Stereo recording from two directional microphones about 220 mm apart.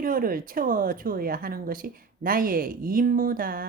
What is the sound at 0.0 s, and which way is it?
Speech, 40° right (ahead or behind).